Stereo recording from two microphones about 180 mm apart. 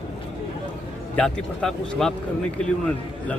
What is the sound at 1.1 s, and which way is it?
A man's voice, 5° left (ahead or behind).